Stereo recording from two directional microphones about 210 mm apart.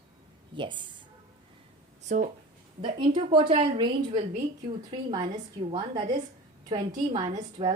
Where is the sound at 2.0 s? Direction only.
35° right (ahead or behind).